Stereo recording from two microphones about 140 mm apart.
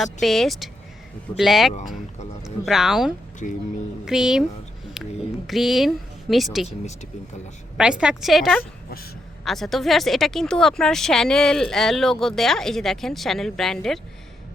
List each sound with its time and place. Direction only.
0.0 s a woman's voice: centre (ahead or behind)
3.4 s speech: 70° left (ahead or behind)
4.0 s a woman's voice: 5° right (ahead or behind)
6.7 s speech: 55° left (ahead or behind)
7.8 s a woman's voice: 5° right (ahead or behind)